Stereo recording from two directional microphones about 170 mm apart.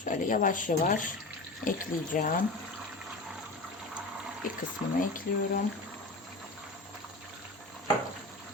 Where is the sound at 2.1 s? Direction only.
55° left (ahead or behind).